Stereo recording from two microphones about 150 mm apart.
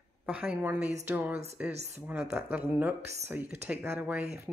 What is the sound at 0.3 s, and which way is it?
Speech, 10° right (ahead or behind).